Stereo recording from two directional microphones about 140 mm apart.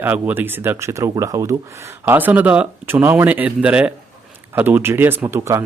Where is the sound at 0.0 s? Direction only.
15° right (ahead or behind).